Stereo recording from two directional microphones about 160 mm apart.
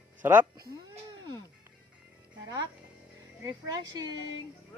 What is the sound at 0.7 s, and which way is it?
Music, 20° right (ahead or behind).